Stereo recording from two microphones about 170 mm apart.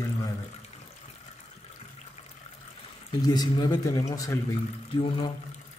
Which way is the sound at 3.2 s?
25° left (ahead or behind).